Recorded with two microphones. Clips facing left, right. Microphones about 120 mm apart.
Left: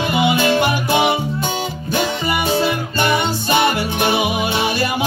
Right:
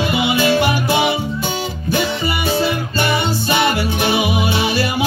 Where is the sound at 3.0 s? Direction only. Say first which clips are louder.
Left 1 dB; 50° left (ahead or behind).